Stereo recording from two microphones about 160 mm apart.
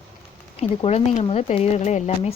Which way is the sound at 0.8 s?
40° left (ahead or behind).